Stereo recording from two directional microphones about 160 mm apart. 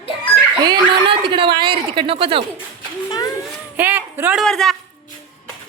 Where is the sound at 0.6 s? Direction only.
30° right (ahead or behind).